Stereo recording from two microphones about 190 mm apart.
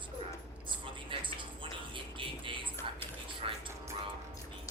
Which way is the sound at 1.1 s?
25° right (ahead or behind).